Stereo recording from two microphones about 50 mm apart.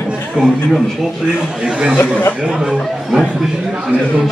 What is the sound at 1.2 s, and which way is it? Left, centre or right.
A man's voice, centre.